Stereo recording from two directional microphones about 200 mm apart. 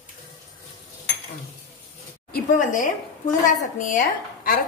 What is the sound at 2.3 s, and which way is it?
A woman's voice, 40° left (ahead or behind).